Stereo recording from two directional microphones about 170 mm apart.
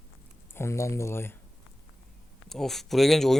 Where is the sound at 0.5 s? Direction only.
15° left (ahead or behind).